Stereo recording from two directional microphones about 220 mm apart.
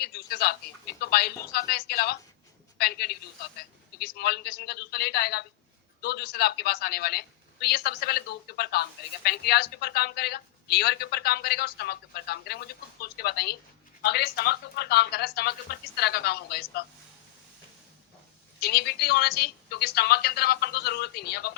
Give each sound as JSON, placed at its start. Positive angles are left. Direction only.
{"t": 0.0, "sound": "a woman's voice", "side_deg": 45}
{"t": 18.6, "sound": "a woman's voice", "side_deg": 45}